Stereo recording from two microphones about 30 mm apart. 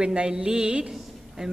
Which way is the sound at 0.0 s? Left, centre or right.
Right.